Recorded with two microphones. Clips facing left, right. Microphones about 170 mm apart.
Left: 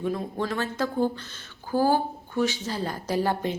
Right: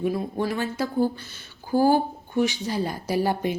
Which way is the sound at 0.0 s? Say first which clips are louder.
Right 3 dB; 10° right (ahead or behind).